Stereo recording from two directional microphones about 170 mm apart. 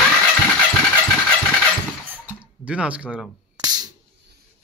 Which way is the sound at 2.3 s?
5° right (ahead or behind).